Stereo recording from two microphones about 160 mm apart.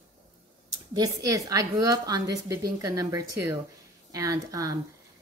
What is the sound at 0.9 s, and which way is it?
Speech, 20° right (ahead or behind).